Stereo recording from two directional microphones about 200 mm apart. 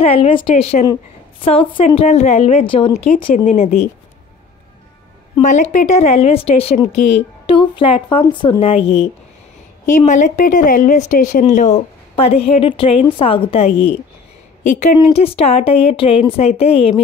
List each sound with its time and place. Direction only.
0.0 s a woman's voice: 25° left (ahead or behind)
5.4 s a woman's voice: 35° left (ahead or behind)